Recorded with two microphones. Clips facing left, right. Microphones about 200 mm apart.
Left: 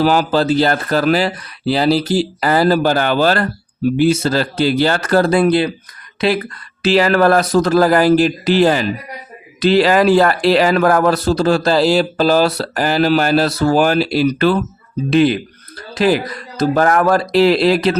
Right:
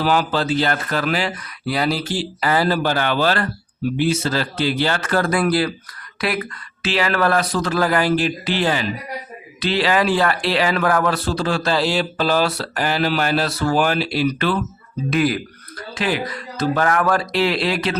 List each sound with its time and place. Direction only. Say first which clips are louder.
0.0 s speech: left 5 dB; 40° left (ahead or behind)
15.1 s speech: left 6 dB; 25° left (ahead or behind)
16.0 s speech: left 8 dB; 40° left (ahead or behind)